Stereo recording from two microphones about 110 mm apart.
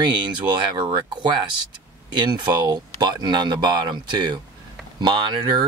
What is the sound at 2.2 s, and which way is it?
Speech, 40° right (ahead or behind).